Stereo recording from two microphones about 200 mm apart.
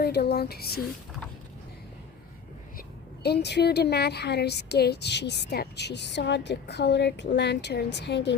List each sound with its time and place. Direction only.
0.0 s speech: 55° left (ahead or behind)
3.2 s speech: 55° left (ahead or behind)